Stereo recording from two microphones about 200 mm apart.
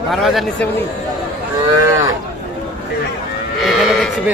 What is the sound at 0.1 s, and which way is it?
Speech, centre (ahead or behind).